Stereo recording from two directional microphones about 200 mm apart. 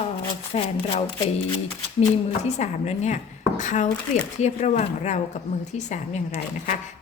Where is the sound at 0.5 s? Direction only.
30° left (ahead or behind).